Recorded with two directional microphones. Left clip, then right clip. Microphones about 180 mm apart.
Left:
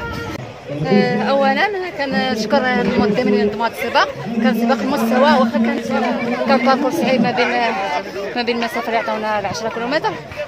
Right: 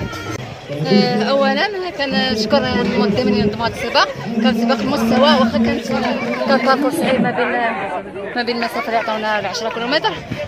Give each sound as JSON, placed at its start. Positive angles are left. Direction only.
{"t": 0.8, "sound": "a woman's voice", "side_deg": 5}